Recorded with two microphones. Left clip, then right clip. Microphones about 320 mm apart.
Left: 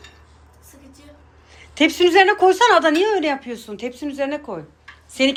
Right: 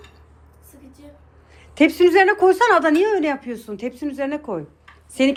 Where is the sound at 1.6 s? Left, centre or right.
Centre.